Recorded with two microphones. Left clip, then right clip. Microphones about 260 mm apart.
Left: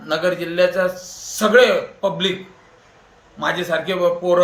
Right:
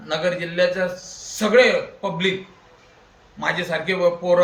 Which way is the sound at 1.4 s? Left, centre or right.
Centre.